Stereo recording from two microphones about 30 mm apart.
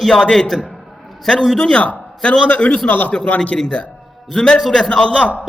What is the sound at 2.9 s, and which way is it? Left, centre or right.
Speech, left.